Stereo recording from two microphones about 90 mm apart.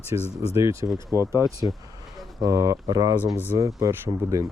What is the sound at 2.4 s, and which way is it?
Speech, 40° right (ahead or behind).